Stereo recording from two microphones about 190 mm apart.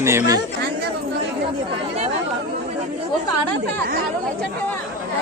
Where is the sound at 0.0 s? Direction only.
15° right (ahead or behind).